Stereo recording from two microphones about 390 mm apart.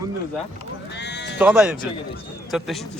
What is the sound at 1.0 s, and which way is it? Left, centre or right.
Sheep, left.